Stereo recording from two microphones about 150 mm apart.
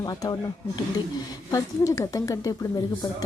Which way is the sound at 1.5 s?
20° left (ahead or behind).